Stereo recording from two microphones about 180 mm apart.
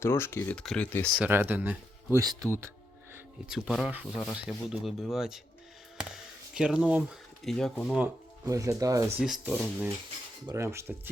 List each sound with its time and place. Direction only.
0.0 s speech: 15° left (ahead or behind)
0.6 s speech: centre (ahead or behind)
1.2 s speech: 10° right (ahead or behind)
3.5 s speech: 5° right (ahead or behind)
8.0 s speech: 20° right (ahead or behind)
9.1 s speech: centre (ahead or behind)
10.4 s speech: 15° right (ahead or behind)